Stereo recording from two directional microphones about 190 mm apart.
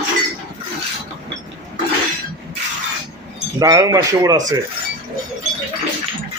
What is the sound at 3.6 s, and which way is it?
Speech, 15° right (ahead or behind).